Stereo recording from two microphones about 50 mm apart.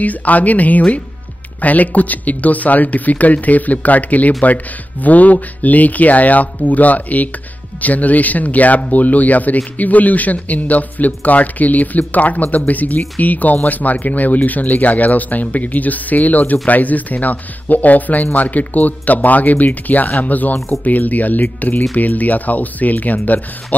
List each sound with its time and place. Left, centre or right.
0.0 s a man's voice: left